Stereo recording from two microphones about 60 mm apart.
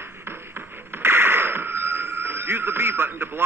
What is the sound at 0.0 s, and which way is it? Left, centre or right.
Radio, right.